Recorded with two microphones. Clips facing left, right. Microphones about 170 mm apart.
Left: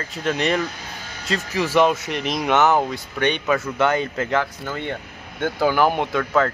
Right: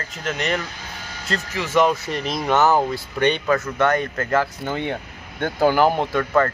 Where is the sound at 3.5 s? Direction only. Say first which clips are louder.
Right 1 dB; 5° left (ahead or behind).